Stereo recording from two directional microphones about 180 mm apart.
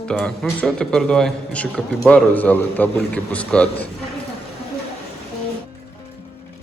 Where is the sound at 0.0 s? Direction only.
5° left (ahead or behind).